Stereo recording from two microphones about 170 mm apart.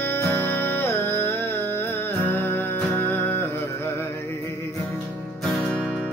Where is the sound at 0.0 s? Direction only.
15° left (ahead or behind).